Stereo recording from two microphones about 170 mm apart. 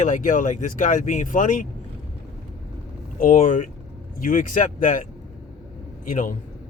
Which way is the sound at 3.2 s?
50° left (ahead or behind).